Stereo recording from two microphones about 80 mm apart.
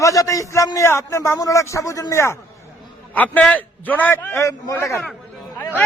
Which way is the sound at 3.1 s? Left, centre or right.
Left.